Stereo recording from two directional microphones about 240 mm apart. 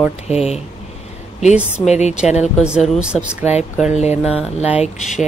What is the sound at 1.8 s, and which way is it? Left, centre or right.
Speech, left.